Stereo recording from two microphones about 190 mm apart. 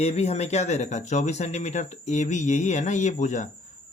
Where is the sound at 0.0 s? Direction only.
35° left (ahead or behind).